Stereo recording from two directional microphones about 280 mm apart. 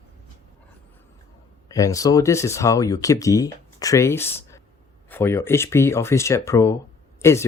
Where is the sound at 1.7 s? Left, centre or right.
Centre.